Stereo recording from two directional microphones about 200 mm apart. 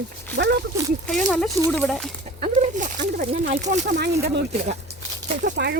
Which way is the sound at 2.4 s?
35° right (ahead or behind).